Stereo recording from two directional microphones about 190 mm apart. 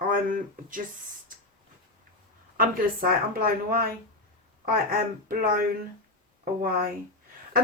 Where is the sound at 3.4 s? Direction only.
50° right (ahead or behind).